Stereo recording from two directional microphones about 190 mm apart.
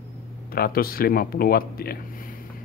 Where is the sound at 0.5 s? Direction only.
50° left (ahead or behind).